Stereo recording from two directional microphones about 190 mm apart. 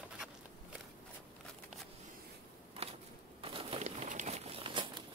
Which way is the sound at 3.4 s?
30° right (ahead or behind).